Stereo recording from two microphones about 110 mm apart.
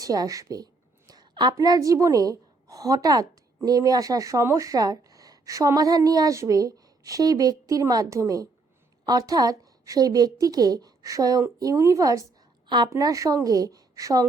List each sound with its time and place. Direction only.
0.0 s a woman's voice: 35° right (ahead or behind)
12.6 s a woman's voice: 40° right (ahead or behind)
12.9 s speech: 30° right (ahead or behind)